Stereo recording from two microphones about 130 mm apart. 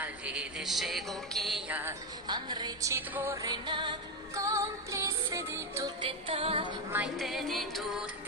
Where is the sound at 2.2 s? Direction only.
35° right (ahead or behind).